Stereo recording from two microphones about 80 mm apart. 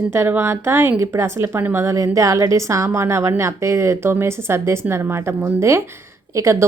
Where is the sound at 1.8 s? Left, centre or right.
Right.